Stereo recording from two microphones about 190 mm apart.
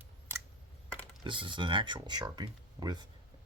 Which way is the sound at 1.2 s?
25° right (ahead or behind).